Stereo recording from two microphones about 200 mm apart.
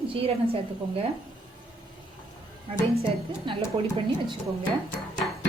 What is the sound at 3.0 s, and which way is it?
Speech, 25° right (ahead or behind).